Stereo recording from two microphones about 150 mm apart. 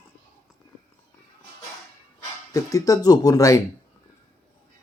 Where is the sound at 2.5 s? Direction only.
20° left (ahead or behind).